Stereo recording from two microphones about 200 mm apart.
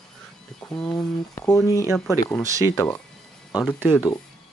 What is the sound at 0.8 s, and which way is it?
Speech, 20° left (ahead or behind).